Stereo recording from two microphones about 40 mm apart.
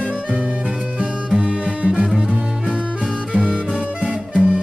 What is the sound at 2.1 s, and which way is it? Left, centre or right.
Music, centre.